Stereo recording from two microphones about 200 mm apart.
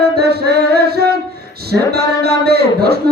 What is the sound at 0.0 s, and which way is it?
Music, 55° right (ahead or behind).